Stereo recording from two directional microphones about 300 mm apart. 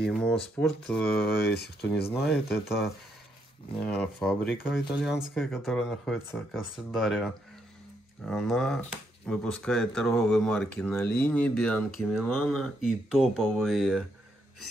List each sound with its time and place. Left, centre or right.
0.2 s speech: centre
1.2 s speech: left
2.1 s speech: centre